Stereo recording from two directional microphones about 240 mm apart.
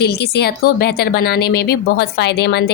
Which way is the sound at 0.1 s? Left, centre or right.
Left.